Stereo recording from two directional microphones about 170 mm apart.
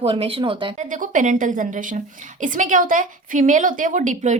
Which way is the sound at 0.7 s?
50° right (ahead or behind).